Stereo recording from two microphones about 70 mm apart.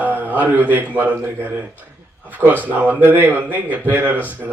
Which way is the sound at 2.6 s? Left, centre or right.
Right.